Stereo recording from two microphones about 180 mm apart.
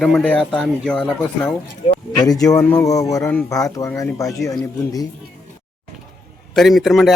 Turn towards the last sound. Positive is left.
turn(degrees=0)  # may be behind; listen again after turning